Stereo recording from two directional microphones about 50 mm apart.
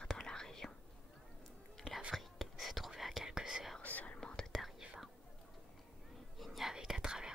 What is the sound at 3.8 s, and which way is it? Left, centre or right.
Whispering, left.